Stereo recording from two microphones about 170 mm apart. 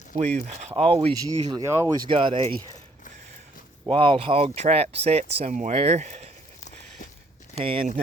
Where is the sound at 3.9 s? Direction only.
30° right (ahead or behind).